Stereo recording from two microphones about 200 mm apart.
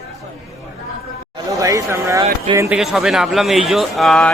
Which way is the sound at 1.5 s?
15° right (ahead or behind).